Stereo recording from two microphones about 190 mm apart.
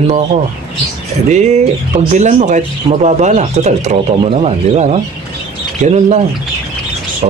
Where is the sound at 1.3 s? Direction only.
35° right (ahead or behind).